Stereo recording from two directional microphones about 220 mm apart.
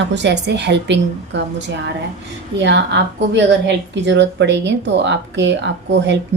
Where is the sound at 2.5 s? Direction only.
50° right (ahead or behind).